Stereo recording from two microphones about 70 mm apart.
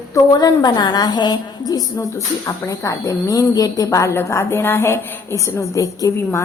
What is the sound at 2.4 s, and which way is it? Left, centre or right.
A woman's voice, left.